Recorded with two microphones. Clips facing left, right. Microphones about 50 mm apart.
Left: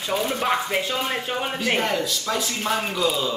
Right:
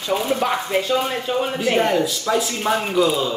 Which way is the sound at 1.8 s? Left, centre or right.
Centre.